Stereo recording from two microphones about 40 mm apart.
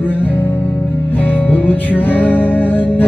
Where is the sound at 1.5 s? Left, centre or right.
Left.